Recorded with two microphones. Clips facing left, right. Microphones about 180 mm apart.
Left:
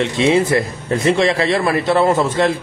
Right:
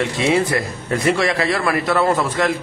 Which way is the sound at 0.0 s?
20° left (ahead or behind).